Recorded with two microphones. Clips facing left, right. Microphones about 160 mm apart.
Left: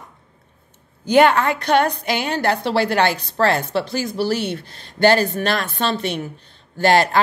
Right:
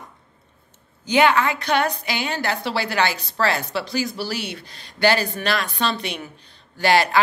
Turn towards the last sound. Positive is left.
turn(degrees=50)  # may be behind; listen again after turning